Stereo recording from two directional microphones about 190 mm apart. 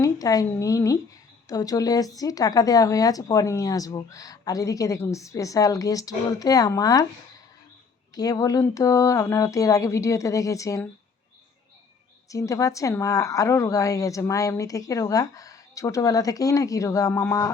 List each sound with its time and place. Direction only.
0.0 s speech: 20° left (ahead or behind)
8.1 s a woman's voice: 20° left (ahead or behind)
12.3 s a woman's voice: 15° left (ahead or behind)